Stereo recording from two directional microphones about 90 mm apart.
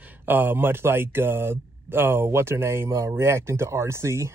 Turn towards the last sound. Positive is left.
turn(degrees=-30)  # may be behind; listen again after turning